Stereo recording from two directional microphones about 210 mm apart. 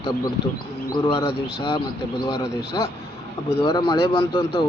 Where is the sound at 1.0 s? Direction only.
25° left (ahead or behind).